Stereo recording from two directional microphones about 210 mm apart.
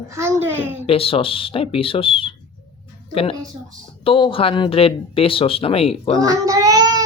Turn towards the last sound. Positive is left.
turn(degrees=-20)  # may be behind; listen again after turning